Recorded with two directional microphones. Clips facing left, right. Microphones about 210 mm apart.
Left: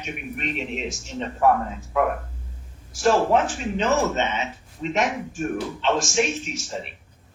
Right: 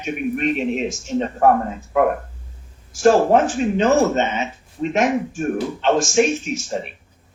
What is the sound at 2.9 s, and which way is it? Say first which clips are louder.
Speech: right 5 dB; 50° right (ahead or behind).